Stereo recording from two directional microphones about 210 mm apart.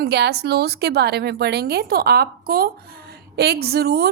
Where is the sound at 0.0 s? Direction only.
50° right (ahead or behind).